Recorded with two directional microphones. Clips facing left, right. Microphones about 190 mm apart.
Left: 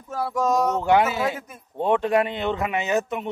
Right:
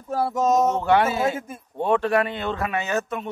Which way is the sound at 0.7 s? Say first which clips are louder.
Even; 15° left (ahead or behind).